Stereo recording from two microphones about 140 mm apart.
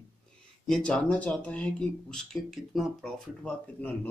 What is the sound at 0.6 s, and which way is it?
Speech, 5° left (ahead or behind).